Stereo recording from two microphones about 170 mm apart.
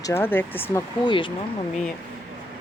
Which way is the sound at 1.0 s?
30° left (ahead or behind).